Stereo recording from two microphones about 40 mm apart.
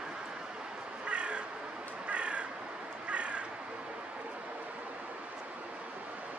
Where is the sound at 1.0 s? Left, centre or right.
Right.